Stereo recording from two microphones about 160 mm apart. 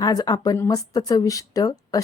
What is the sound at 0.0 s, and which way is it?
Speech, 25° left (ahead or behind).